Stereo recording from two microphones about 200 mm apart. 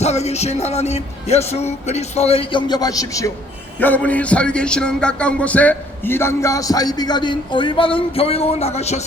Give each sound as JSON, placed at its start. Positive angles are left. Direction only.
{"t": 0.0, "sound": "speech", "side_deg": 35}